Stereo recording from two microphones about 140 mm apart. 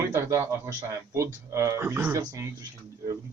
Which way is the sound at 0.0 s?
20° right (ahead or behind).